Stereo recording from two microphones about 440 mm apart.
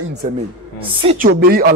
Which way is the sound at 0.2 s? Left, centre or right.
Centre.